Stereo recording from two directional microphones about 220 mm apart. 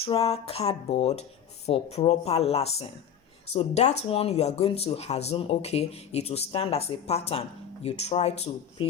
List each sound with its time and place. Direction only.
0.0 s speech: 25° left (ahead or behind)